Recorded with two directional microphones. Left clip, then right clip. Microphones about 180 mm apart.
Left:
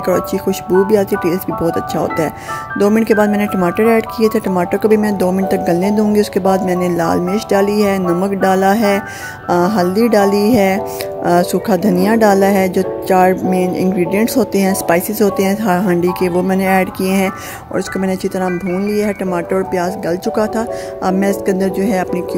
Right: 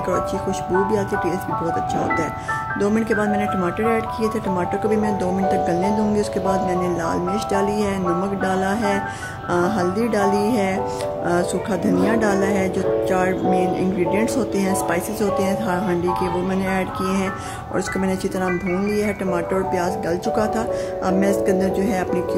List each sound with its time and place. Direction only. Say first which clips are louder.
0.0 s speech: left 6 dB; 35° left (ahead or behind)